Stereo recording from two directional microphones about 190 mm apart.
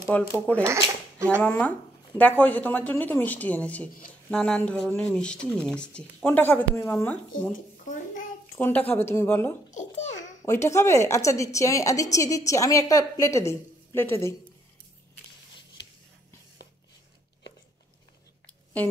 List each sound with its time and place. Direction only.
0.1 s a woman's voice: 5° left (ahead or behind)
8.5 s a woman's voice: 10° left (ahead or behind)
9.7 s babbling: 40° left (ahead or behind)
10.4 s a woman's voice: 15° left (ahead or behind)